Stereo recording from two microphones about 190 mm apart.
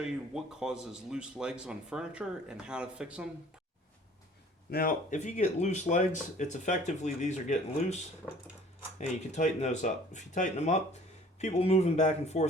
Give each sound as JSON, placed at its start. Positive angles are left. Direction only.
{"t": 0.0, "sound": "a man's voice", "side_deg": -5}
{"t": 4.7, "sound": "speech", "side_deg": 45}